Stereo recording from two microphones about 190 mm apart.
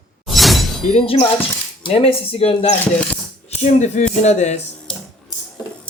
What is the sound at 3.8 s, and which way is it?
Speech, 35° left (ahead or behind).